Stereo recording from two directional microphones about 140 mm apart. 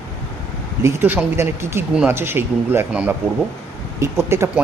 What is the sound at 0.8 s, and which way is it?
Speech, 15° right (ahead or behind).